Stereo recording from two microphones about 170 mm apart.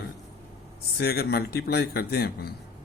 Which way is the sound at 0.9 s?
70° left (ahead or behind).